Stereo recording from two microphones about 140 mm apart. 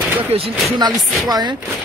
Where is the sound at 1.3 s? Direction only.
30° right (ahead or behind).